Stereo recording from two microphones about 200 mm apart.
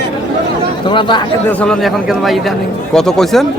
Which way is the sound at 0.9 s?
25° left (ahead or behind).